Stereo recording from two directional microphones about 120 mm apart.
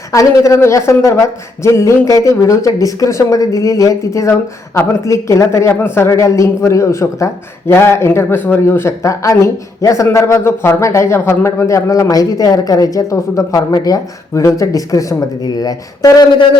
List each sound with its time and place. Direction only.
0.1 s speech: 30° left (ahead or behind)